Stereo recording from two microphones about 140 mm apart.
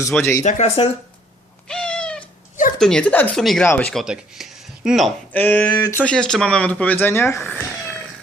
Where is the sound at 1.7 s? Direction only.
5° left (ahead or behind).